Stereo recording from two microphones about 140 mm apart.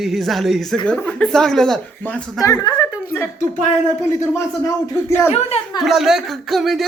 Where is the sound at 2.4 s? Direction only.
25° left (ahead or behind).